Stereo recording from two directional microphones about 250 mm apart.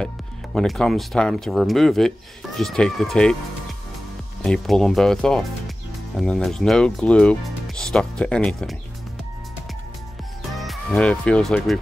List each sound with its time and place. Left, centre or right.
0.6 s speech: centre
4.4 s speech: centre
10.6 s speech: centre